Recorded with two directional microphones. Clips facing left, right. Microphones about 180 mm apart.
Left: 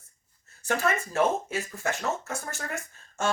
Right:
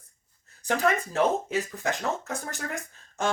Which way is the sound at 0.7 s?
15° right (ahead or behind).